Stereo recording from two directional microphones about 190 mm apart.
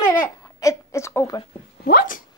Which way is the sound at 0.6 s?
15° left (ahead or behind).